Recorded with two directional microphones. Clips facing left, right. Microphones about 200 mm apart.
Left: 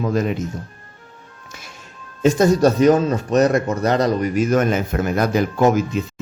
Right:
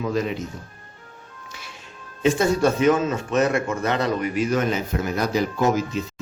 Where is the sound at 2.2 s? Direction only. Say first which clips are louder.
Left 5 dB; 40° left (ahead or behind).